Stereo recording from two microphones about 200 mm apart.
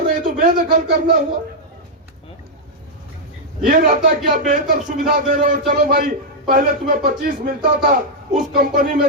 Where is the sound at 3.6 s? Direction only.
45° right (ahead or behind).